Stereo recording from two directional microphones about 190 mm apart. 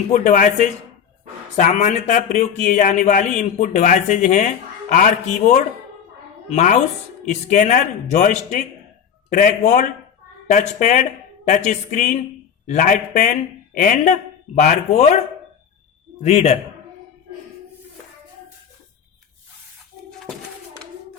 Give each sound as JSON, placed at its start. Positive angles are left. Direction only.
{"t": 0.1, "sound": "speech", "side_deg": 45}
{"t": 16.2, "sound": "speech", "side_deg": 35}
{"t": 20.1, "sound": "a sound", "side_deg": 5}